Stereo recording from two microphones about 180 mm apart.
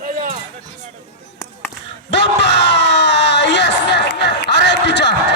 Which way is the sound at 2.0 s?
75° left (ahead or behind).